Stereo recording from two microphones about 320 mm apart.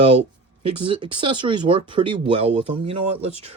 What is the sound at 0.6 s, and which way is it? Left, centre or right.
Speech, centre.